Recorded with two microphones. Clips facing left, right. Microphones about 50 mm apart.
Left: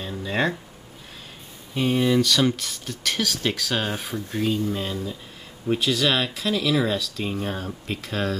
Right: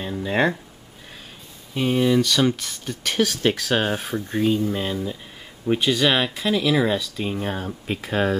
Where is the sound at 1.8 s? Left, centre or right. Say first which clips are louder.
Right 1 dB; centre.